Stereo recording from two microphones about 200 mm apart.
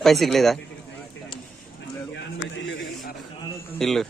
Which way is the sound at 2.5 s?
65° left (ahead or behind).